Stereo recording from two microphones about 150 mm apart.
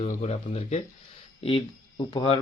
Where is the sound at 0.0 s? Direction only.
50° left (ahead or behind).